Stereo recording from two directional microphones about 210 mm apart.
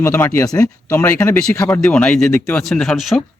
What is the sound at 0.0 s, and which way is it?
Speech, 15° left (ahead or behind).